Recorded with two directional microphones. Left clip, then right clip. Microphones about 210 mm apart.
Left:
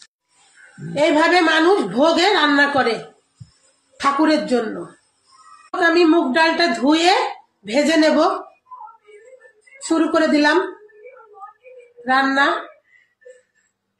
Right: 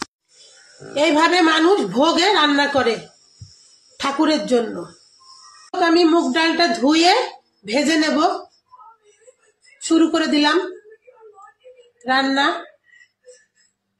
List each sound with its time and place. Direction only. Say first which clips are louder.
0.9 s a woman's voice: left 1 dB; 25° right (ahead or behind)
4.0 s a woman's voice: left 2 dB; 20° right (ahead or behind)
5.8 s a woman's voice: left 1 dB; 20° right (ahead or behind)
9.8 s a woman's voice: even; 20° right (ahead or behind)
12.0 s a woman's voice: left 2 dB; 20° right (ahead or behind)